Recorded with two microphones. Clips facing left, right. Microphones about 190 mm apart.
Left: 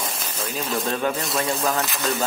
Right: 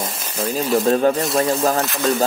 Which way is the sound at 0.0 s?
Centre (ahead or behind).